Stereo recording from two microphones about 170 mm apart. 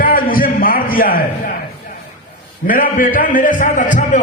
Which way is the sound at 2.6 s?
55° left (ahead or behind).